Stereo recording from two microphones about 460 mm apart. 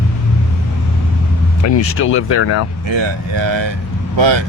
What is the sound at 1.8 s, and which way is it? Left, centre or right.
Speech, left.